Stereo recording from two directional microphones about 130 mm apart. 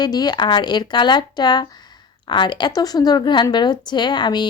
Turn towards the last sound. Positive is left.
turn(degrees=35)  # may be behind; listen again after turning